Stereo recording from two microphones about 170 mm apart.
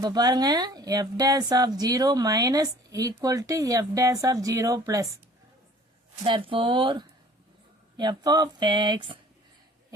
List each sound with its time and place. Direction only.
0.0 s a woman's voice: 25° right (ahead or behind)
6.2 s a woman's voice: 30° right (ahead or behind)